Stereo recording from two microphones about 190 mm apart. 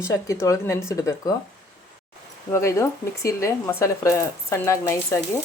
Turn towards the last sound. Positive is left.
turn(degrees=15)  # may be behind; listen again after turning